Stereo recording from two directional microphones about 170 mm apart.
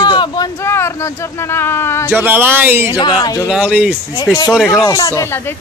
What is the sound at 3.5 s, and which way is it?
Speech, 5° right (ahead or behind).